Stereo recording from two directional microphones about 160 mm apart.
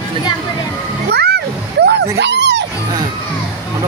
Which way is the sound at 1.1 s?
90° right.